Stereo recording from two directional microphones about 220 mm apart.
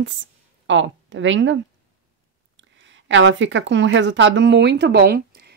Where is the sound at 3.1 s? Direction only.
55° right (ahead or behind).